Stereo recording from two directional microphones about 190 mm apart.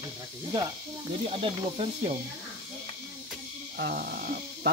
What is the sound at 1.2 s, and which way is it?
Speech, 30° right (ahead or behind).